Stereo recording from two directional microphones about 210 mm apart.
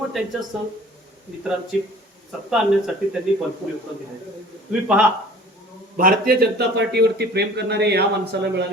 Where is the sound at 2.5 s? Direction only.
5° right (ahead or behind).